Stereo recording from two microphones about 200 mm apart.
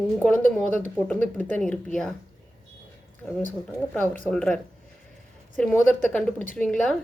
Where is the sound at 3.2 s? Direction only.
Centre (ahead or behind).